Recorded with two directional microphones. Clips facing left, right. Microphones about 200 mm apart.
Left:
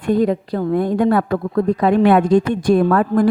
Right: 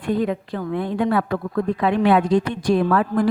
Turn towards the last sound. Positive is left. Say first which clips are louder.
# left 4 dB
turn(degrees=45)  # may be behind; listen again after turning